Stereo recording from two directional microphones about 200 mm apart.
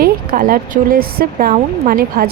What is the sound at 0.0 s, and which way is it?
Speech, 45° right (ahead or behind).